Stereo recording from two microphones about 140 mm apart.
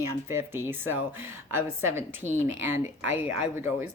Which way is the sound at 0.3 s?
15° right (ahead or behind).